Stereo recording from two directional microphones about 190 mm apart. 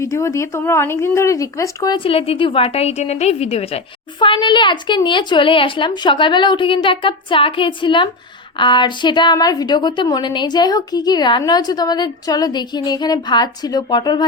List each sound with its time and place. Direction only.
0.0 s a woman's voice: 15° left (ahead or behind)